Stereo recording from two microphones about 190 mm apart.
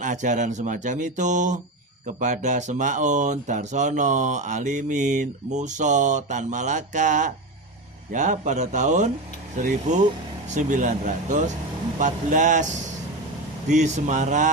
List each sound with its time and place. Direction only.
0.0 s speech: 40° right (ahead or behind)
10.5 s speech: 40° right (ahead or behind)
13.7 s speech: 40° right (ahead or behind)